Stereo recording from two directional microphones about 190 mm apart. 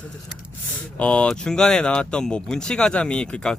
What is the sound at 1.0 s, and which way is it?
Speech, 5° left (ahead or behind).